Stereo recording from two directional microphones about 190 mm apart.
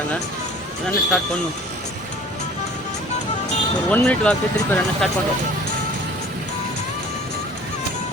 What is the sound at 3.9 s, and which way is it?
Speech, 5° left (ahead or behind).